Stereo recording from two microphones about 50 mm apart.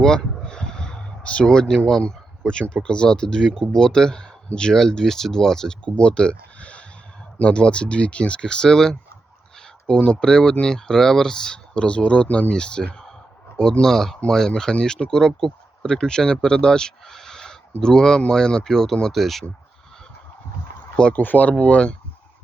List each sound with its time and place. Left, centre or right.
0.0 s speech: centre
6.0 s a sound: left
7.4 s speech: left; by 19.5 s centre
20.9 s speech: left
21.2 s speech: left
21.6 s speech: left